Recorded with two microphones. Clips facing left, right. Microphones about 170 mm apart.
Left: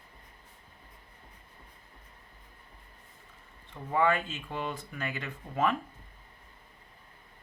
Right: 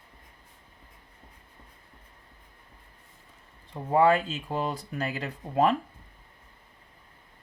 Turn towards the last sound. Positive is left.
turn(degrees=-35)  # may be behind; listen again after turning